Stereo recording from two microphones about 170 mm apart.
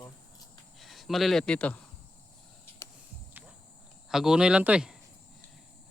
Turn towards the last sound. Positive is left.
turn(degrees=-5)  # may be behind; listen again after turning